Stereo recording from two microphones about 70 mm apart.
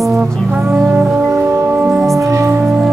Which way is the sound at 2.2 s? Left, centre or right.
Right.